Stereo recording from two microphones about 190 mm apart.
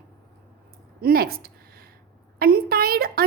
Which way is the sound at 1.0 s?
50° right (ahead or behind).